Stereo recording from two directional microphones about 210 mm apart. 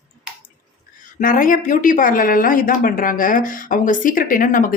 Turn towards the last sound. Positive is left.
turn(degrees=40)  # may be behind; listen again after turning